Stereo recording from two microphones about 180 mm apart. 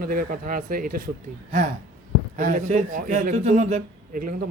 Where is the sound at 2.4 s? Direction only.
45° right (ahead or behind).